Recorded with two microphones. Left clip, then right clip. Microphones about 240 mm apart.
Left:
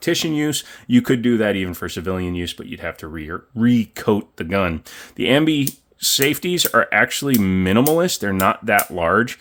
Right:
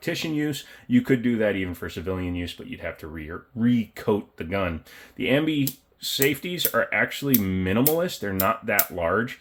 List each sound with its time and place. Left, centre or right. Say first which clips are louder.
0.0 s speech: left 7 dB; left